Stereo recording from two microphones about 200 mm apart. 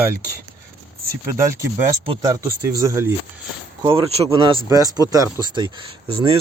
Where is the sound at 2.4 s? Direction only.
15° right (ahead or behind).